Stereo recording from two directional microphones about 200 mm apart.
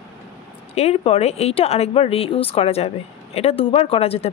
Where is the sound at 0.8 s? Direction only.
30° left (ahead or behind).